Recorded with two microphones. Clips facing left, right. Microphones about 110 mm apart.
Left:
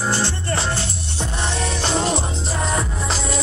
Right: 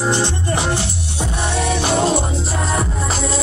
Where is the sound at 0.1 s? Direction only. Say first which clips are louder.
Right 3 dB; 15° right (ahead or behind).